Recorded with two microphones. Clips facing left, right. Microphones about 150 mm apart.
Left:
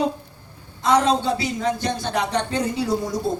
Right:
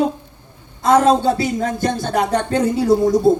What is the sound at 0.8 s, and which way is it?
Speech, 45° right (ahead or behind).